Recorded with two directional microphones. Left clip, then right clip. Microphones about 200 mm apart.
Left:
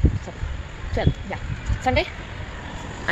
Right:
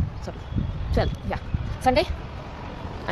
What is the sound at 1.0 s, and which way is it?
Speech, 15° right (ahead or behind).